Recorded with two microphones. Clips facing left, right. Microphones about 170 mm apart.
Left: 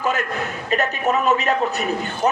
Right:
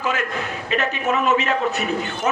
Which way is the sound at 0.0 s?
40° left (ahead or behind).